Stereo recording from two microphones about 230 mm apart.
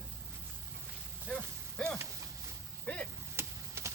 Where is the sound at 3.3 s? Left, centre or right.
Centre.